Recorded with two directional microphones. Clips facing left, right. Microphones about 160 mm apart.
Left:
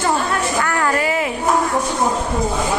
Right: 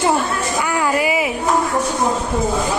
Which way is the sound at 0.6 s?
10° right (ahead or behind).